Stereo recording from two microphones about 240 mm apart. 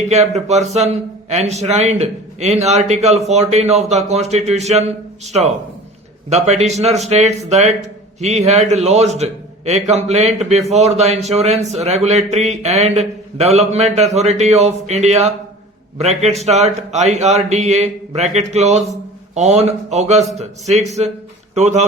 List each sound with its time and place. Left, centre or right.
0.1 s a man's voice: right